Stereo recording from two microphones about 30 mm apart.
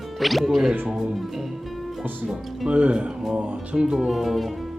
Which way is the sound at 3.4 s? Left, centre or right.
Right.